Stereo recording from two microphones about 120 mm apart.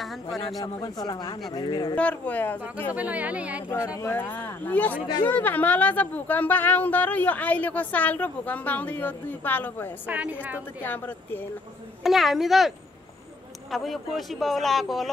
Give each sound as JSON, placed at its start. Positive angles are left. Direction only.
{"t": 0.0, "sound": "a man's voice", "side_deg": 0}
{"t": 0.6, "sound": "a man's voice", "side_deg": 35}
{"t": 2.0, "sound": "speech", "side_deg": 10}
{"t": 2.9, "sound": "speech", "side_deg": -10}
{"t": 3.7, "sound": "speech", "side_deg": 25}
{"t": 10.0, "sound": "speech", "side_deg": -10}
{"t": 10.8, "sound": "speech", "side_deg": 15}
{"t": 12.0, "sound": "speech", "side_deg": 0}